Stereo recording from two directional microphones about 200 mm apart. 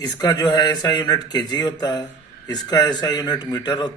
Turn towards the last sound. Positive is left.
turn(degrees=20)  # may be behind; listen again after turning